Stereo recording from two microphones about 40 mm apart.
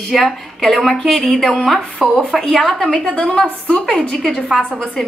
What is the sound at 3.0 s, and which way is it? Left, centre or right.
Speech, left.